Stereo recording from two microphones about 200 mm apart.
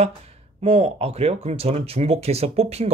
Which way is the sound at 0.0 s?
30° right (ahead or behind).